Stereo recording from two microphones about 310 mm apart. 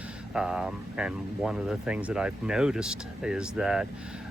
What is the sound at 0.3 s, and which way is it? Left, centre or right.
Speech, centre.